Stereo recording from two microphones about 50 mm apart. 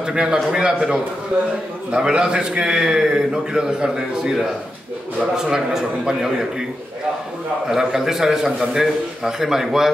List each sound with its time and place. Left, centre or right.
0.0 s a man's voice: centre
5.3 s a man's voice: centre
7.6 s a man's voice: centre